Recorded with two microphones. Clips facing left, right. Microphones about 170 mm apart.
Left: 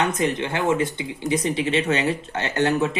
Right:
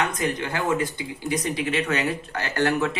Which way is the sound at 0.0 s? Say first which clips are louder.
Left 3 dB; 25° left (ahead or behind).